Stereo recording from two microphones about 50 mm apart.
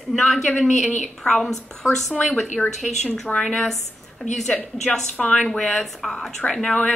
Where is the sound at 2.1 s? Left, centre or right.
Left.